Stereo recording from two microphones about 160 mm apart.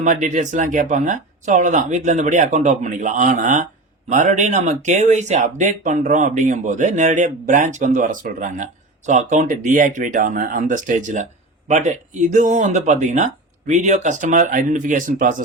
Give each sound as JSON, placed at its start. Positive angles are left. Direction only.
{"t": 0.0, "sound": "speech", "side_deg": -50}